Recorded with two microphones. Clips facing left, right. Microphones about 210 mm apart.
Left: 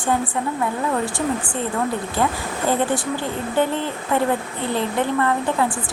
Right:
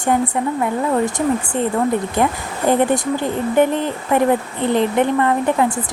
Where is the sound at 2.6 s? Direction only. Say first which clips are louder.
Right 5 dB; 20° right (ahead or behind).